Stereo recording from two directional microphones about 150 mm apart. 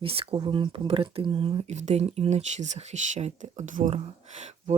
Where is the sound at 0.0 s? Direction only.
40° right (ahead or behind).